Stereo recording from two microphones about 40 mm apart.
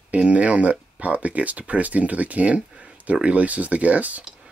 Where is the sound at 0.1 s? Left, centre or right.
Right.